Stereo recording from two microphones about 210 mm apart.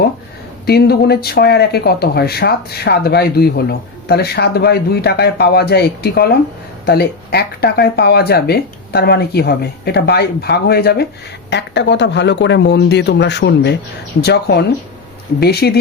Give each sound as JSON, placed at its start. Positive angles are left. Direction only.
{"t": 0.6, "sound": "speech", "side_deg": 50}